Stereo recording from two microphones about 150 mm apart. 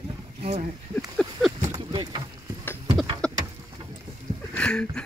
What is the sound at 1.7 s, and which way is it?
Boat, 30° right (ahead or behind).